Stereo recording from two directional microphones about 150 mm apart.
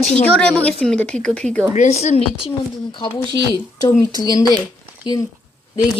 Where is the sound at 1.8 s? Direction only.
45° left (ahead or behind).